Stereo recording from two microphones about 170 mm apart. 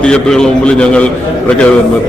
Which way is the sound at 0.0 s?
5° left (ahead or behind).